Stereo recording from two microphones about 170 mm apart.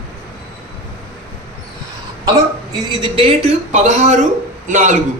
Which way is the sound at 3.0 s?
35° right (ahead or behind).